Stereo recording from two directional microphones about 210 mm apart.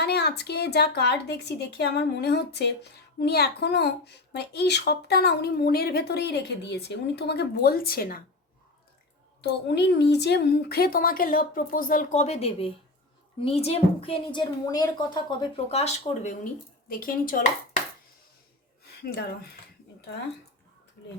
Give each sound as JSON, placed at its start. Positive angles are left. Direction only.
{"t": 0.0, "sound": "speech", "side_deg": 50}
{"t": 9.4, "sound": "a woman's voice", "side_deg": 55}